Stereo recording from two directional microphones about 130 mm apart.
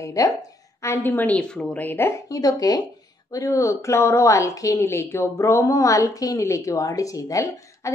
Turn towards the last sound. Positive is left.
turn(degrees=25)  # may be behind; listen again after turning